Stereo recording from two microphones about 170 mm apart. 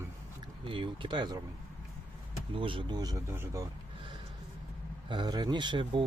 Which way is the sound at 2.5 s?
30° right (ahead or behind).